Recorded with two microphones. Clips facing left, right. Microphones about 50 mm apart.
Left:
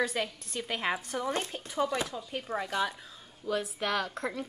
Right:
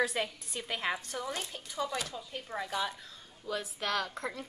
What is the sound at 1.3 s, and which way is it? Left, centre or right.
Speech, left.